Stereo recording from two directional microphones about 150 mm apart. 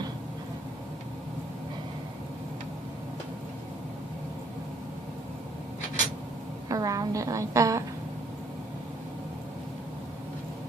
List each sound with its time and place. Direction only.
6.7 s a woman's voice: 20° right (ahead or behind)